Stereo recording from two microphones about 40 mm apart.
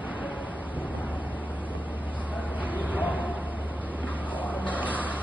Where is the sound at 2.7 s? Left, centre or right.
Right.